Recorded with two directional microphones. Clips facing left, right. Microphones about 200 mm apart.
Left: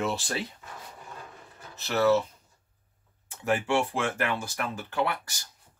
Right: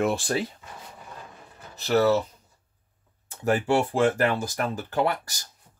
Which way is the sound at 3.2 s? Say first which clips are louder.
Right 4 dB; 40° right (ahead or behind).